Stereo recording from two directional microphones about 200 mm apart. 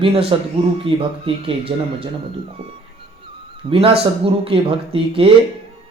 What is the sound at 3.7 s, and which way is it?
Speech, 25° right (ahead or behind).